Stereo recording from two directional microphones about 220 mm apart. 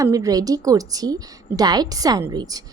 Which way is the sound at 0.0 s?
15° right (ahead or behind).